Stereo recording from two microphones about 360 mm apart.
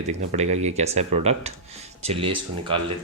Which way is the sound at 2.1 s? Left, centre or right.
Centre.